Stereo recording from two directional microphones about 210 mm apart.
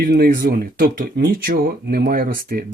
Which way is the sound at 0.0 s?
45° right (ahead or behind).